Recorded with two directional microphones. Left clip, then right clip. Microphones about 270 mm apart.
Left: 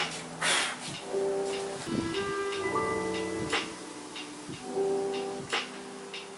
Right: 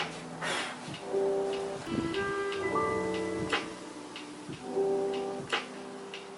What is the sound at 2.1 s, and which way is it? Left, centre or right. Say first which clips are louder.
Music: even; centre.